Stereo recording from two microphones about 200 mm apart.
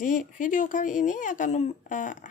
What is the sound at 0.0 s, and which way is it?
Speech, 40° left (ahead or behind).